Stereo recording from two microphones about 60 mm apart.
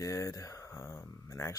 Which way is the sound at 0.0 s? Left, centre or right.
Left.